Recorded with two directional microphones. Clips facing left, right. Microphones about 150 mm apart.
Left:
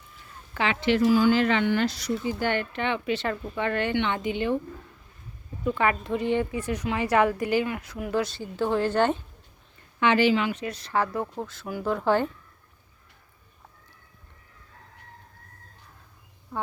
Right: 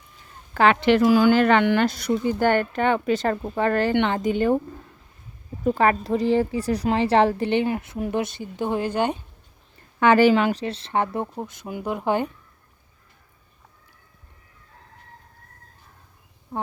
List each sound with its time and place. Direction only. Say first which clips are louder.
0.5 s a woman's voice: right 7 dB; 55° right (ahead or behind); by 1.4 s 90° right
1.4 s a woman's voice: right 5 dB; 60° right (ahead or behind)
1.9 s speech: right 5 dB; 55° right (ahead or behind)
5.6 s a woman's voice: right 5 dB; 40° right (ahead or behind); by 9.1 s 15° right (ahead or behind)
10.0 s a woman's voice: right 5 dB; 45° right (ahead or behind); by 12.3 s 15° right (ahead or behind)